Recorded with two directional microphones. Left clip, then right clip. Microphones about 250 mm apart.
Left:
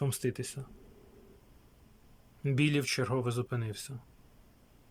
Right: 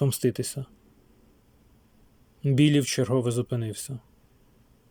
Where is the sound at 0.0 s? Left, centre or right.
Centre.